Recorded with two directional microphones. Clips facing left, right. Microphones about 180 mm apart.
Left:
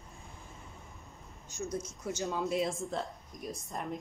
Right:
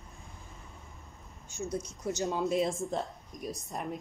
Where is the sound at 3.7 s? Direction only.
10° right (ahead or behind).